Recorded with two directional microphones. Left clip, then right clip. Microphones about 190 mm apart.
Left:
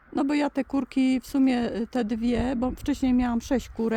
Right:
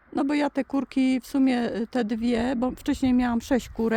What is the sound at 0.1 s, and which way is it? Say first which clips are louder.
Speech: even; 10° right (ahead or behind).